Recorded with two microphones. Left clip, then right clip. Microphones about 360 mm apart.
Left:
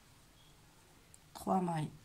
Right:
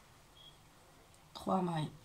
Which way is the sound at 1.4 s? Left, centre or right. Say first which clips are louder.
Left 1 dB; centre.